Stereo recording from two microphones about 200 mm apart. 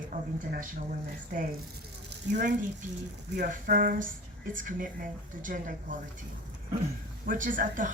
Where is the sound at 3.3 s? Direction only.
45° right (ahead or behind).